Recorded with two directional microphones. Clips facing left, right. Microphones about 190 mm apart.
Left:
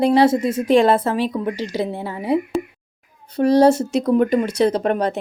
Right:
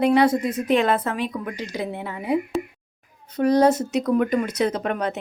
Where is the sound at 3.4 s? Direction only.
30° left (ahead or behind).